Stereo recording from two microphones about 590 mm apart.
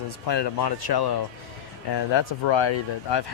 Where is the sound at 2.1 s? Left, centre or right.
Left.